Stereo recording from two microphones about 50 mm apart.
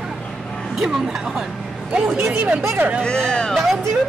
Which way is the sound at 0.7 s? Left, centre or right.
Centre.